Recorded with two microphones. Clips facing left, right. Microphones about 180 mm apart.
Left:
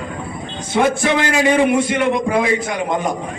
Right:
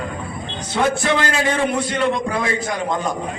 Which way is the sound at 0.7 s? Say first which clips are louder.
Left 3 dB; 15° left (ahead or behind).